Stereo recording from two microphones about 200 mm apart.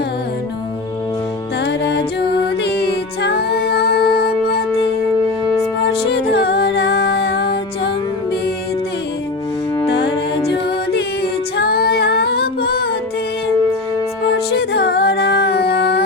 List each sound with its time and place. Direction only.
1.6 s music: 60° left (ahead or behind)
6.1 s music: 60° left (ahead or behind)
9.8 s music: 60° left (ahead or behind)
14.5 s music: 55° left (ahead or behind)